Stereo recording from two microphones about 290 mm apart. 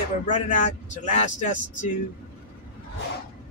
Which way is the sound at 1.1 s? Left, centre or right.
Left.